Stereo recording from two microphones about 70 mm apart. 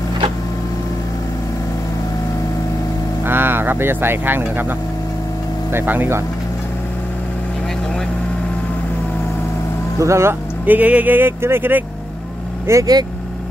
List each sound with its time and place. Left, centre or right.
3.3 s speech: right
9.9 s speech: right
10.6 s speech: right
12.7 s speech: right